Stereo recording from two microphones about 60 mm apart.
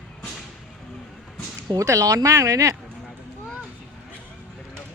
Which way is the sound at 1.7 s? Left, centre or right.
Right.